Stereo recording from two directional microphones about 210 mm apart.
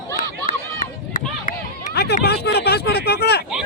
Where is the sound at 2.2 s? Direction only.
50° left (ahead or behind).